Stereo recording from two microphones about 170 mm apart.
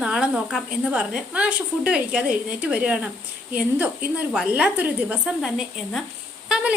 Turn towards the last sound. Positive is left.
turn(degrees=-5)  # may be behind; listen again after turning